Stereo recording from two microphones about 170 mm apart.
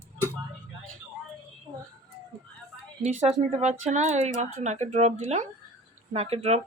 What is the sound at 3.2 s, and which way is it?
Speech, 45° right (ahead or behind).